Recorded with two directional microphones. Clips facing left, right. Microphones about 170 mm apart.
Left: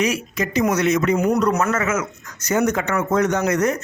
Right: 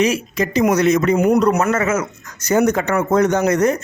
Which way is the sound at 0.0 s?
30° right (ahead or behind).